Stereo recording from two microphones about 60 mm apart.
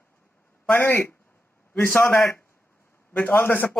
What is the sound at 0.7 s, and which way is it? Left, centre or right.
A man's voice, left.